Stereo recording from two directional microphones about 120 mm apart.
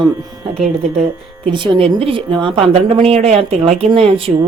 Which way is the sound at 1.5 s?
45° right (ahead or behind).